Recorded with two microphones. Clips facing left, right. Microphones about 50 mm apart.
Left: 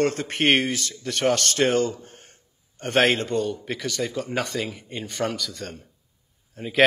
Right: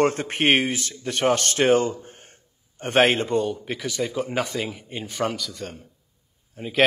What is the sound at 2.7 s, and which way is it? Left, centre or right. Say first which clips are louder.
A man's voice: right 1 dB; centre.